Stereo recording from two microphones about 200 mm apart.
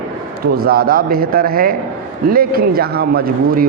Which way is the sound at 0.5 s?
50° right (ahead or behind).